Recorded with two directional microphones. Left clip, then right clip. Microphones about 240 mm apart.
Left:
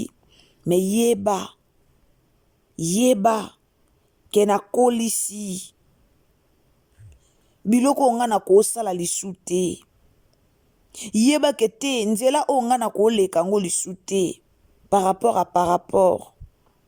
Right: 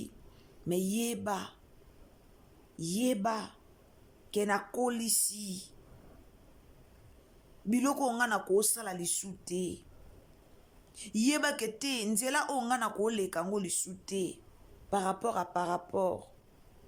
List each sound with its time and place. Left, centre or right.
0.6 s speech: left
2.7 s speech: left
7.7 s speech: left
10.9 s speech: left